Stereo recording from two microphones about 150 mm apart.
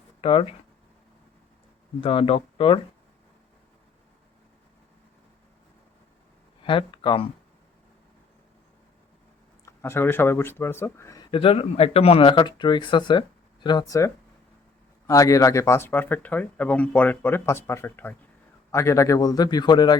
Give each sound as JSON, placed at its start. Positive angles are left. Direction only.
{"t": 0.2, "sound": "speech", "side_deg": 40}
{"t": 2.0, "sound": "speech", "side_deg": 35}
{"t": 6.6, "sound": "speech", "side_deg": 35}
{"t": 9.6, "sound": "speech", "side_deg": 15}
{"t": 11.3, "sound": "speech", "side_deg": 35}